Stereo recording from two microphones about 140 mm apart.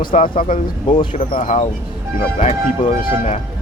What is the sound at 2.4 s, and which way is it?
Speech, 45° left (ahead or behind).